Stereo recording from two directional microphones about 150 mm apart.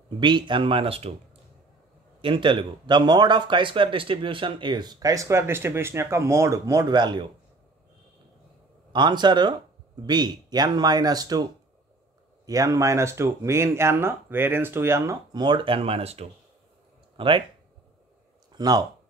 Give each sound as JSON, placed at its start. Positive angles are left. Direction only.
{"t": 0.2, "sound": "speech", "side_deg": -30}
{"t": 2.2, "sound": "speech", "side_deg": -35}
{"t": 8.9, "sound": "speech", "side_deg": -30}
{"t": 12.4, "sound": "speech", "side_deg": -25}
{"t": 15.4, "sound": "speech", "side_deg": -35}
{"t": 18.5, "sound": "speech", "side_deg": -25}